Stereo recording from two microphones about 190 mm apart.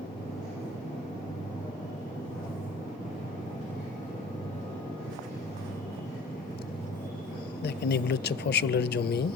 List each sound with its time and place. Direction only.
7.6 s speech: 60° left (ahead or behind)